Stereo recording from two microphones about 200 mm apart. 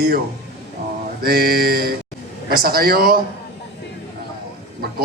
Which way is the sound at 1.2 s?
50° right (ahead or behind).